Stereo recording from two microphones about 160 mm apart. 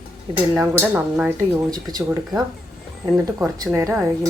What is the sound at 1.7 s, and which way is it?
Speech, 25° right (ahead or behind).